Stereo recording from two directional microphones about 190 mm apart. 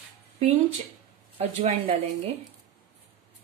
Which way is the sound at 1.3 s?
30° right (ahead or behind).